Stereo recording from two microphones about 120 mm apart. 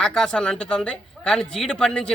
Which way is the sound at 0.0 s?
5° left (ahead or behind).